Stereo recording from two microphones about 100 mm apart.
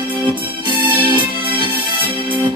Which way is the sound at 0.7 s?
55° right (ahead or behind).